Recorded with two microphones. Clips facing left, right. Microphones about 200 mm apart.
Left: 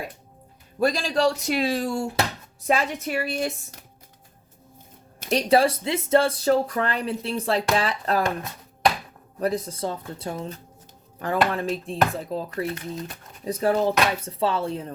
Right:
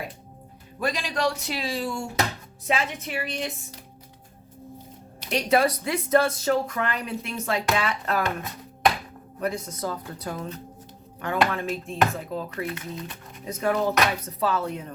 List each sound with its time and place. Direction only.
0.8 s a woman's voice: 35° left (ahead or behind)
5.2 s speech: 40° left (ahead or behind)
9.4 s speech: 35° left (ahead or behind)
11.5 s speech: 35° left (ahead or behind)